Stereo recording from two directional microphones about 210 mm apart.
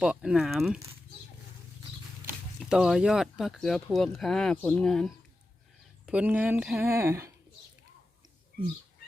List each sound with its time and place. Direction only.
0.0 s speech: 5° right (ahead or behind)
2.6 s speech: centre (ahead or behind)
6.1 s speech: 5° right (ahead or behind)
6.9 s speech: 15° right (ahead or behind)
8.5 s bird: 40° left (ahead or behind)